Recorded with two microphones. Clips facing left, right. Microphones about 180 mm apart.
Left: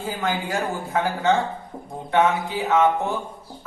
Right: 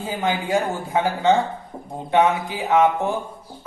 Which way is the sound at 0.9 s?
20° right (ahead or behind).